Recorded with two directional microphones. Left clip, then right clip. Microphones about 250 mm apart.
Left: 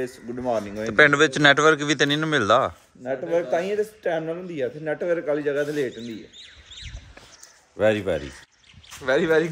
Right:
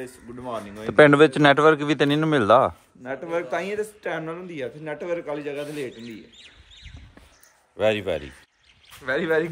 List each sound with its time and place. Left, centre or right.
0.0 s speech: centre
0.8 s a man's voice: centre
5.9 s speech: right
7.7 s speech: centre